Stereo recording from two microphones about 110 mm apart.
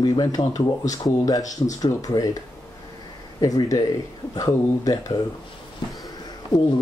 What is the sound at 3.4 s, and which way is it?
Speech, 35° left (ahead or behind).